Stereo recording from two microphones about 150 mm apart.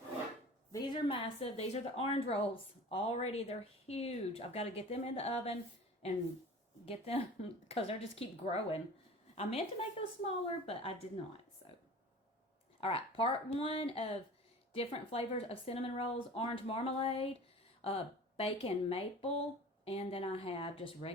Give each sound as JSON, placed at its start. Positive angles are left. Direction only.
{"t": 0.7, "sound": "a woman's voice", "side_deg": 30}
{"t": 6.8, "sound": "a woman's voice", "side_deg": 40}
{"t": 12.8, "sound": "a woman's voice", "side_deg": 40}